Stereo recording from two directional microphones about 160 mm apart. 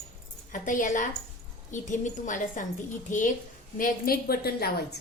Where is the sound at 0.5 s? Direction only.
55° left (ahead or behind); by 5.0 s 80° left.